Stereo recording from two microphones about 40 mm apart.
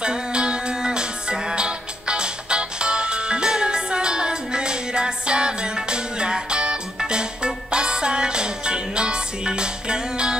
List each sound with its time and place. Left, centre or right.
0.0 s music: right